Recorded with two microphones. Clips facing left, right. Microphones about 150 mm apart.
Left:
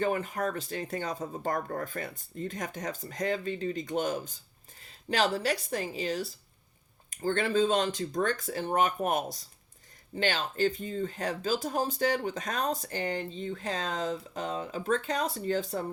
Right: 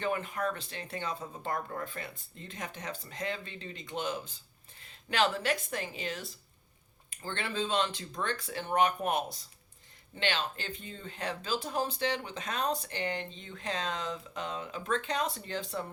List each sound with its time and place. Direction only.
0.0 s speech: 40° left (ahead or behind)